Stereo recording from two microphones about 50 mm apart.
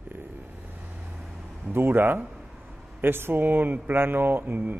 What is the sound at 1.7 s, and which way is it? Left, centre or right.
Speech, right.